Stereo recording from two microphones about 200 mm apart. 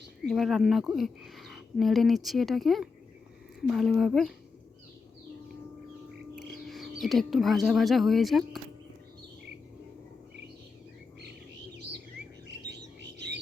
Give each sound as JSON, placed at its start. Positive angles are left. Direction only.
{"t": 0.3, "sound": "speech", "side_deg": 0}
{"t": 6.7, "sound": "speech", "side_deg": 0}
{"t": 12.5, "sound": "bird", "side_deg": -60}